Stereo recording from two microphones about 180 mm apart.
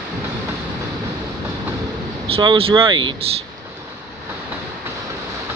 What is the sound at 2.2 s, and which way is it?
Speech, 30° right (ahead or behind).